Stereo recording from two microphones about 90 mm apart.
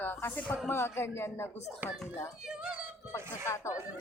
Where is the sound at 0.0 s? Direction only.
25° left (ahead or behind).